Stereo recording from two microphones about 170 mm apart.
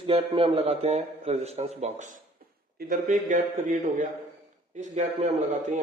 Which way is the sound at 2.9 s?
45° right (ahead or behind).